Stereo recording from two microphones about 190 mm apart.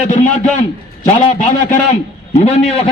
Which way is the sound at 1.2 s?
35° left (ahead or behind).